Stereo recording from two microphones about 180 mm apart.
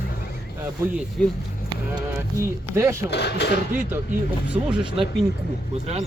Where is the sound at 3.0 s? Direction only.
70° left (ahead or behind).